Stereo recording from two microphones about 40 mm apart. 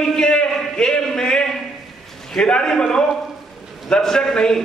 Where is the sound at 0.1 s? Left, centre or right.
Left.